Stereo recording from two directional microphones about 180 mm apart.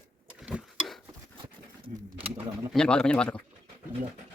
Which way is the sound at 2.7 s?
5° left (ahead or behind).